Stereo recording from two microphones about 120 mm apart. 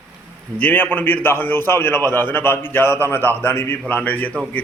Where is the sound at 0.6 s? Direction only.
15° left (ahead or behind).